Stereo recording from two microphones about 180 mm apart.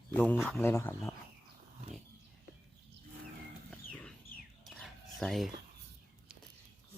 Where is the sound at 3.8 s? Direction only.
50° left (ahead or behind).